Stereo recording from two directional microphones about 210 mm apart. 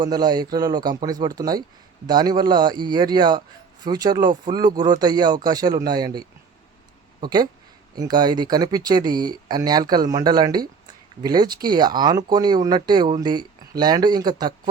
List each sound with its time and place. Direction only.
0.0 s speech: 20° right (ahead or behind)